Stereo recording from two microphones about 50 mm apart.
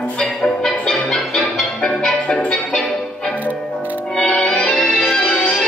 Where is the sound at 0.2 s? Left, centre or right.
Centre.